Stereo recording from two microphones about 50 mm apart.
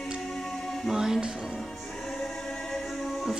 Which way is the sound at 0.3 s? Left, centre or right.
Centre.